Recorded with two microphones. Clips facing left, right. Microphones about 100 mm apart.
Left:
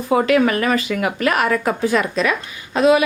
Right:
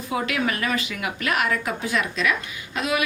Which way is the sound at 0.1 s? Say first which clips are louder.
Left 10 dB; 50° left (ahead or behind).